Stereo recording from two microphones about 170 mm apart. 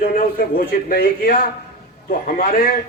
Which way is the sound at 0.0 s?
60° left (ahead or behind).